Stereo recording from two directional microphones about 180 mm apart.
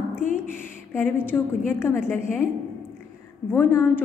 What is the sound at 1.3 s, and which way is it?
A woman's voice, 10° left (ahead or behind).